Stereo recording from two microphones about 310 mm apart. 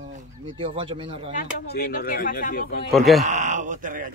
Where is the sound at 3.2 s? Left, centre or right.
Right.